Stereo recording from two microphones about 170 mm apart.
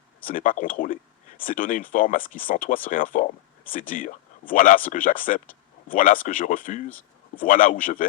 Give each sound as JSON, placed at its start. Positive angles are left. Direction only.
{"t": 0.3, "sound": "speech", "side_deg": 55}